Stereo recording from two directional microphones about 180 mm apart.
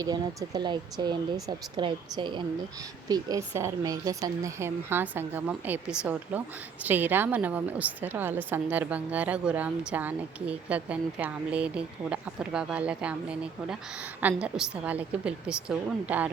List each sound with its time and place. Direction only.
0.0 s a woman's voice: 20° right (ahead or behind)